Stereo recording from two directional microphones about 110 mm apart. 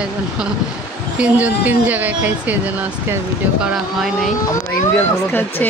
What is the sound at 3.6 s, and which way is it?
Speech, centre (ahead or behind).